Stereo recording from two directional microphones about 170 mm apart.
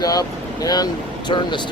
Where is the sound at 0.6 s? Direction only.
25° left (ahead or behind).